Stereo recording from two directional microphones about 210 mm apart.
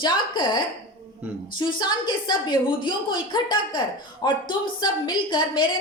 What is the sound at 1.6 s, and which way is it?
A woman's voice, 20° left (ahead or behind).